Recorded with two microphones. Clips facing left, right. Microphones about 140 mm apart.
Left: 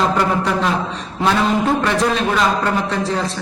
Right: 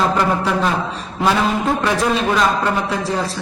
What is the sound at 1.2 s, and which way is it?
A man's voice, 5° right (ahead or behind).